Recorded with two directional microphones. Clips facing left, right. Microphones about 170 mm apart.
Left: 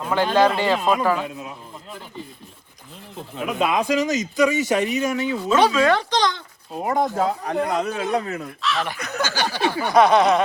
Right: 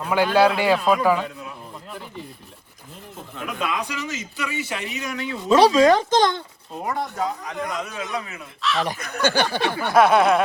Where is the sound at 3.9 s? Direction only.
40° left (ahead or behind).